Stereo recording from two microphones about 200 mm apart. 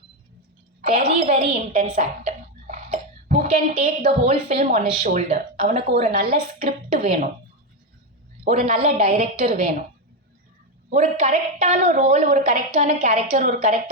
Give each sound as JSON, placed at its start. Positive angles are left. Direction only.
{"t": 0.8, "sound": "a woman's voice", "side_deg": -35}
{"t": 8.4, "sound": "a woman's voice", "side_deg": -35}
{"t": 10.8, "sound": "a woman's voice", "side_deg": -35}